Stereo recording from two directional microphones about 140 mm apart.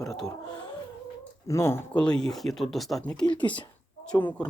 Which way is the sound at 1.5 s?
20° left (ahead or behind).